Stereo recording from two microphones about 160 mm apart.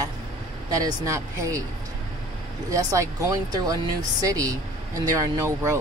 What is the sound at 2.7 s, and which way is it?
Speech, 20° right (ahead or behind).